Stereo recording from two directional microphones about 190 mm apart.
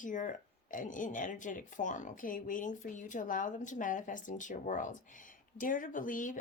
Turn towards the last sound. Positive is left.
turn(degrees=45)  # may be behind; listen again after turning